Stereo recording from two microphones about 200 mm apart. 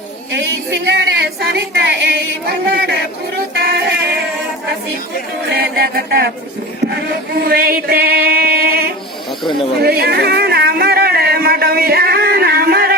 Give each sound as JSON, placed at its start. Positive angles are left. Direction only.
{"t": 0.3, "sound": "speech", "side_deg": -60}
{"t": 2.5, "sound": "chant", "side_deg": -55}
{"t": 5.5, "sound": "chant", "side_deg": -50}
{"t": 6.9, "sound": "music", "side_deg": -50}
{"t": 9.8, "sound": "a sound", "side_deg": -50}